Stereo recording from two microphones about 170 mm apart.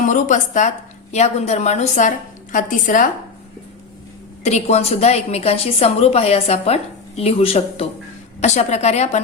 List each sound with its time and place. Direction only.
0.0 s a woman's voice: 50° left (ahead or behind)
4.4 s a woman's voice: 40° left (ahead or behind)